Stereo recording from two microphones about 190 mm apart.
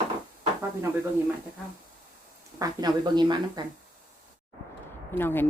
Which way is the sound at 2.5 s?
20° right (ahead or behind).